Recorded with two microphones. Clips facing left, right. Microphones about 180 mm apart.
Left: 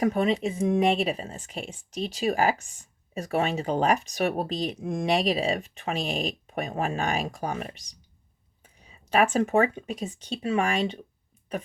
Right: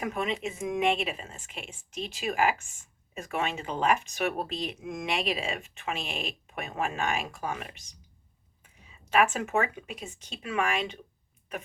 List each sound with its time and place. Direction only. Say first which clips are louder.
0.0 s speech: left 7 dB; 35° left (ahead or behind)